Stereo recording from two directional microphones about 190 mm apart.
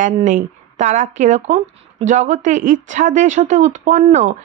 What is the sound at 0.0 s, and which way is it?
Speech, 40° right (ahead or behind).